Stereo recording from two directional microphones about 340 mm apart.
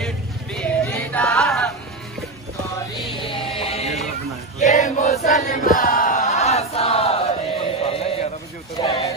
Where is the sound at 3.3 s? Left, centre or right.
Centre.